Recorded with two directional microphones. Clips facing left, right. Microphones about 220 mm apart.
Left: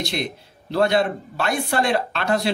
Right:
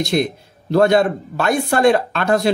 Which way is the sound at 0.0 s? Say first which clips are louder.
Right 8 dB; 45° right (ahead or behind).